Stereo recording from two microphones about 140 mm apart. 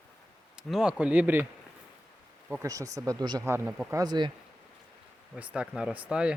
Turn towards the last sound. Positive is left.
turn(degrees=-5)  # may be behind; listen again after turning